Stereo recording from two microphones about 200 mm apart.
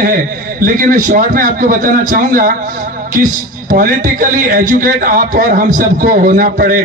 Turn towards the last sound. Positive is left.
turn(degrees=-45)  # may be behind; listen again after turning